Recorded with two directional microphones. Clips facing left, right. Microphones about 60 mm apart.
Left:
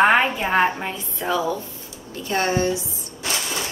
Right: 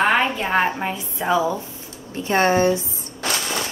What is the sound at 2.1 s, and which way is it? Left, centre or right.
Speech, right.